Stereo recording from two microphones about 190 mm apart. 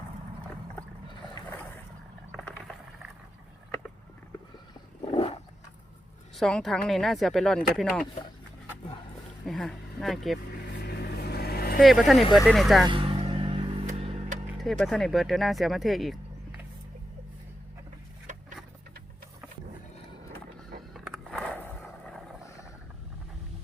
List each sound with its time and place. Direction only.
1.1 s boat: 25° left (ahead or behind)
5.1 s a sound: 30° left (ahead or behind)
6.3 s speech: centre (ahead or behind)
9.5 s speech: centre (ahead or behind)
10.8 s vehicle: 55° left (ahead or behind)
11.8 s speech: centre (ahead or behind)
12.2 s speech: 25° left (ahead or behind)
12.5 s speech: centre (ahead or behind)
12.9 s vehicle: 25° right (ahead or behind)
14.6 s speech: centre (ahead or behind)
18.3 s vehicle: 40° right (ahead or behind)
20.9 s a sound: centre (ahead or behind)